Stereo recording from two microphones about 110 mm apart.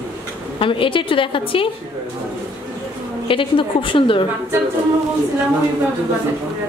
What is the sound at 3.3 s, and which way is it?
Speech, 50° left (ahead or behind).